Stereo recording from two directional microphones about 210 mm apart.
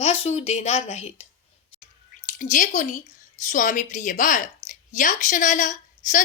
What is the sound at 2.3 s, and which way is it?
Speech, 40° left (ahead or behind).